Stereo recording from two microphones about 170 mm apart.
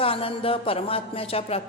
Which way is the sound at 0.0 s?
35° left (ahead or behind).